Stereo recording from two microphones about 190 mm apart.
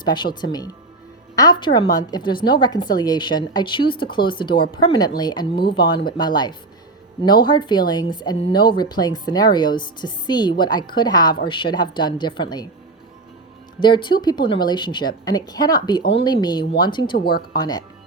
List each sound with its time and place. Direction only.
0.0 s a woman's voice: 25° left (ahead or behind)
13.8 s a woman's voice: 25° left (ahead or behind)